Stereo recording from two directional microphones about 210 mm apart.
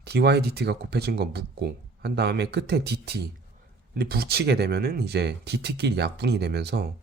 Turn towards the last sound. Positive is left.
turn(degrees=-50)  # may be behind; listen again after turning